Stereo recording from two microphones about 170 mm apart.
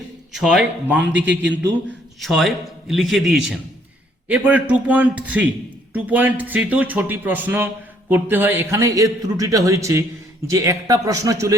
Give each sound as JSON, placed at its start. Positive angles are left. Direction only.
{"t": 0.3, "sound": "a man's voice", "side_deg": -5}